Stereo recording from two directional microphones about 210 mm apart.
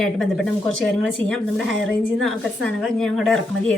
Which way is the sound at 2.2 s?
5° left (ahead or behind).